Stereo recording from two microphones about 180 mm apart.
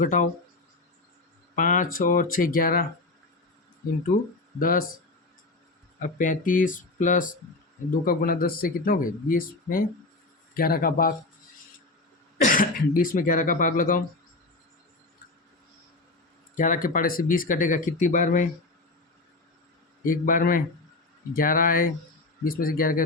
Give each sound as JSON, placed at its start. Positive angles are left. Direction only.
{"t": 0.0, "sound": "speech", "side_deg": 45}
{"t": 1.5, "sound": "speech", "side_deg": 45}
{"t": 4.1, "sound": "speech", "side_deg": 50}
{"t": 6.0, "sound": "a man's voice", "side_deg": 45}
{"t": 12.5, "sound": "speech", "side_deg": 50}
{"t": 16.6, "sound": "speech", "side_deg": 45}
{"t": 20.1, "sound": "speech", "side_deg": 50}